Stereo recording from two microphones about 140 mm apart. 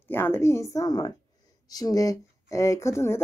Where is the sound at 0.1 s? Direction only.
15° left (ahead or behind).